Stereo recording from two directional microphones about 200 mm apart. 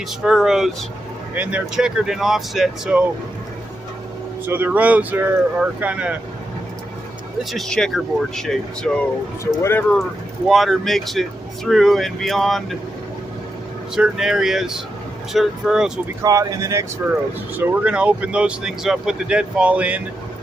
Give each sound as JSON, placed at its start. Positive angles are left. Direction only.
{"t": 0.2, "sound": "speech", "side_deg": 0}
{"t": 4.4, "sound": "speech", "side_deg": -10}
{"t": 7.5, "sound": "speech", "side_deg": 0}
{"t": 10.5, "sound": "speech", "side_deg": 0}
{"t": 13.9, "sound": "speech", "side_deg": -5}
{"t": 16.2, "sound": "speech", "side_deg": -15}